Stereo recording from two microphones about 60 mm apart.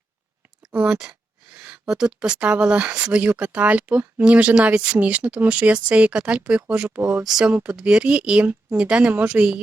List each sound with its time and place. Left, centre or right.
0.7 s speech: right
1.5 s a sound: centre
1.9 s speech: centre
7.3 s speech: centre